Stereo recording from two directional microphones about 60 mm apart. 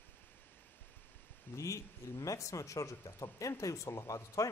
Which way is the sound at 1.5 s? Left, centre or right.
Left.